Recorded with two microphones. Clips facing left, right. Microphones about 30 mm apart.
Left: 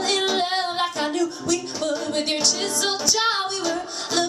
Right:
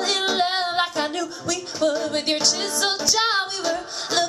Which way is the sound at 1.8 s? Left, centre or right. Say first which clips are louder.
Right 4 dB; right.